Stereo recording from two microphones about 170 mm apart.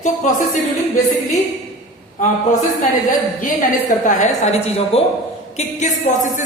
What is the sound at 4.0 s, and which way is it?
Music, 45° left (ahead or behind).